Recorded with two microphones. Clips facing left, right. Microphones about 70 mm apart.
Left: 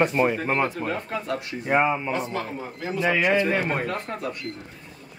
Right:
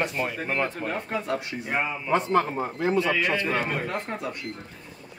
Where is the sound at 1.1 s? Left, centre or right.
Right.